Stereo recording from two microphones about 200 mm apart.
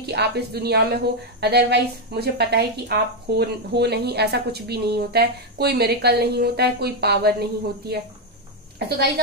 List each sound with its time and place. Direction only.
0.0 s a woman's voice: 55° right (ahead or behind)
8.7 s a woman's voice: 55° right (ahead or behind)